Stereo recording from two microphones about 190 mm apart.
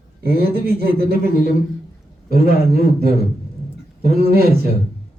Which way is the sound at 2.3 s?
55° right (ahead or behind).